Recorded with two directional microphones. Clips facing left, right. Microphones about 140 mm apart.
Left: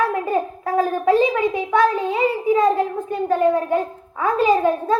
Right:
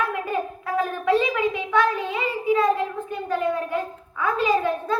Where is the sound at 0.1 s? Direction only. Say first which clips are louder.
Left 5 dB; 40° left (ahead or behind).